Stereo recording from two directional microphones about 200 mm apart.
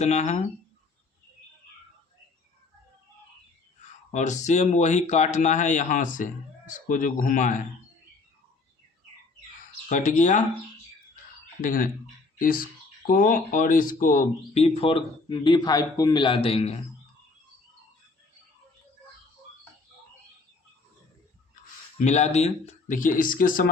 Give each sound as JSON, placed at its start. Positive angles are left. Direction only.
{"t": 0.0, "sound": "speech", "side_deg": 35}
{"t": 4.1, "sound": "speech", "side_deg": 35}
{"t": 9.9, "sound": "speech", "side_deg": 40}
{"t": 11.6, "sound": "speech", "side_deg": 45}
{"t": 21.9, "sound": "speech", "side_deg": 35}